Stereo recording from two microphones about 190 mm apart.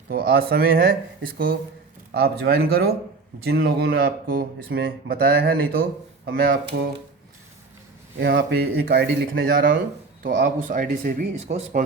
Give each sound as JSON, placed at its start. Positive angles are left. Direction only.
{"t": 0.1, "sound": "speech", "side_deg": -50}
{"t": 2.1, "sound": "speech", "side_deg": -55}
{"t": 8.2, "sound": "speech", "side_deg": -75}